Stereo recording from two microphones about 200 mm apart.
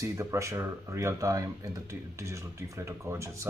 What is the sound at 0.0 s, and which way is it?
Speech, 15° right (ahead or behind).